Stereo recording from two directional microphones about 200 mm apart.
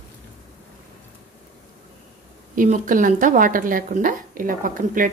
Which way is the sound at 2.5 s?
40° right (ahead or behind).